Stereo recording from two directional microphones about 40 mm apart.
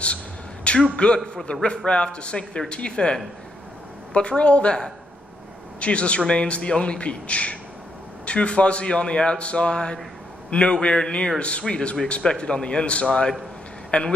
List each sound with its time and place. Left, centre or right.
0.9 s speech: left